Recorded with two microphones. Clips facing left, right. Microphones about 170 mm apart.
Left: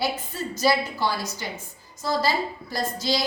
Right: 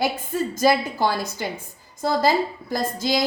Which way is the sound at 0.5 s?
50° right (ahead or behind).